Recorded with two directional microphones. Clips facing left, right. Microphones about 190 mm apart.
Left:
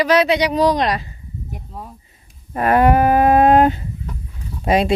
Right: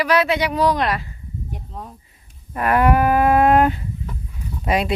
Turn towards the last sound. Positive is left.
turn(degrees=25)  # may be behind; listen again after turning